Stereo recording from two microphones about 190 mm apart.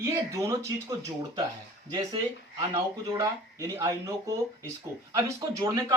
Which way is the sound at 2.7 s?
20° right (ahead or behind).